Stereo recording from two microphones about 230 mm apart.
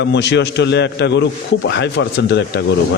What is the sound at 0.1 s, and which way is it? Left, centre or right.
A man's voice, left.